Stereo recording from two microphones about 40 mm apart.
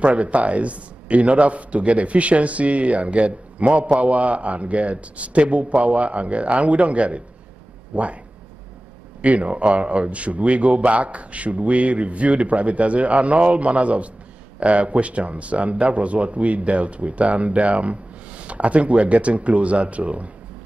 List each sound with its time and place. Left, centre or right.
0.0 s speech: right
9.2 s speech: right